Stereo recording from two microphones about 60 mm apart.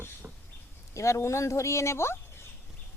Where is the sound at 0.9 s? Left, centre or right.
Left.